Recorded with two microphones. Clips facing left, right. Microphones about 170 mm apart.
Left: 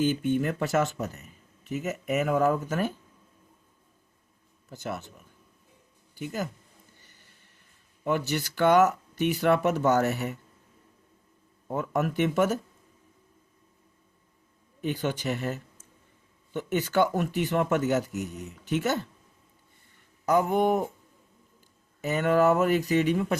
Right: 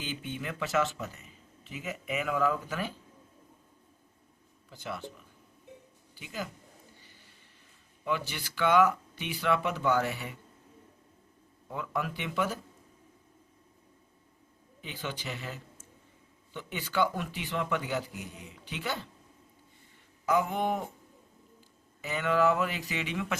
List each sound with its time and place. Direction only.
0.0 s a man's voice: 45° left (ahead or behind)
4.7 s a man's voice: 45° left (ahead or behind)
7.0 s a sound: 45° left (ahead or behind)
8.0 s a man's voice: 45° left (ahead or behind)
11.7 s a man's voice: 45° left (ahead or behind)
14.8 s a man's voice: 50° left (ahead or behind)
20.2 s a man's voice: 45° left (ahead or behind)
22.0 s a man's voice: 45° left (ahead or behind)